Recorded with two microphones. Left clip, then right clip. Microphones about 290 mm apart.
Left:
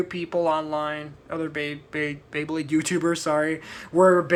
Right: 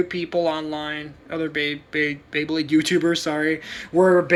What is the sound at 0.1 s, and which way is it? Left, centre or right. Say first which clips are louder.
Speech: right 1 dB; centre.